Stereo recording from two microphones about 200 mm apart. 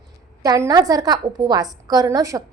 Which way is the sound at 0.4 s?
20° right (ahead or behind).